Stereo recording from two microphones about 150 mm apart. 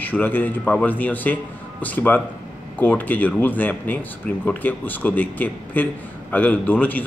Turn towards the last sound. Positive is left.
turn(degrees=10)  # may be behind; listen again after turning